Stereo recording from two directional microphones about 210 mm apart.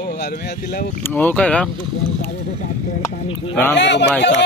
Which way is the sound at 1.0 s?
10° left (ahead or behind).